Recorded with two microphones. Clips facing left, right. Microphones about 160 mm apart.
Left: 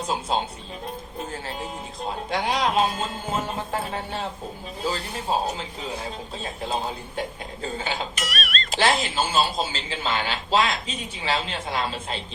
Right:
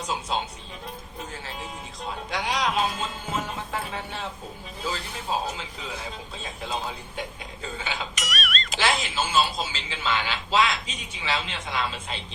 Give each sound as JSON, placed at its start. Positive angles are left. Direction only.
{"t": 0.0, "sound": "speech", "side_deg": 30}